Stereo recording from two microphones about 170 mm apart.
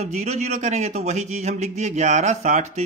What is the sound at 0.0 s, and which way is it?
Speech, 45° right (ahead or behind).